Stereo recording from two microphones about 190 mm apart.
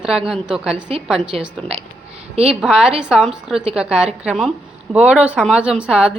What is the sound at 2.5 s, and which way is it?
Speech, 5° right (ahead or behind).